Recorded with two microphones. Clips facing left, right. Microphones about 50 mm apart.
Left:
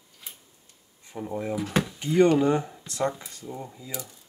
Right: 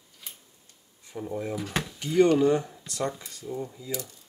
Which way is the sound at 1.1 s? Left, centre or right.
Centre.